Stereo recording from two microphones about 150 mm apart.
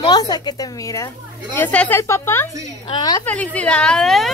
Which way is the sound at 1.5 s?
10° left (ahead or behind).